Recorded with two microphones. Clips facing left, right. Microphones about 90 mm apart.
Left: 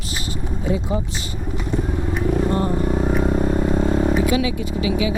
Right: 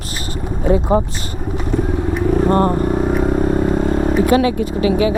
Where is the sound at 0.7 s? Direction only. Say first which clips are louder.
Right 9 dB; 50° right (ahead or behind).